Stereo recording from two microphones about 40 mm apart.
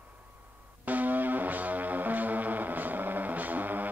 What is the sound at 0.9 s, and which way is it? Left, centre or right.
Music, right.